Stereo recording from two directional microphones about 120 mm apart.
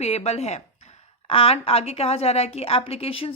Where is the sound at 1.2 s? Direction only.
55° left (ahead or behind).